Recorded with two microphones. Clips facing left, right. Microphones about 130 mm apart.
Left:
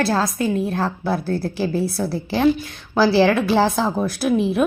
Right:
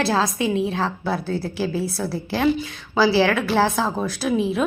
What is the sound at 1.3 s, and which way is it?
Speech, 10° right (ahead or behind).